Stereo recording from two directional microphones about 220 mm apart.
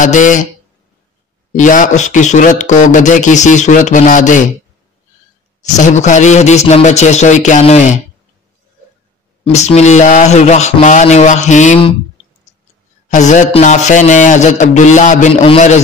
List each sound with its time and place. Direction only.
0.0 s speech: 35° left (ahead or behind)
1.5 s speech: 35° left (ahead or behind)
5.6 s speech: 35° left (ahead or behind)
9.4 s speech: 30° left (ahead or behind)
13.1 s speech: 35° left (ahead or behind)